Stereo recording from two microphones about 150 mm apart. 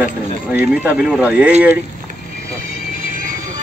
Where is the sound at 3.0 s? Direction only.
60° right (ahead or behind).